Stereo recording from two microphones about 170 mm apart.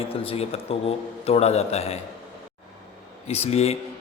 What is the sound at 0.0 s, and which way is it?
A man's voice, 35° left (ahead or behind).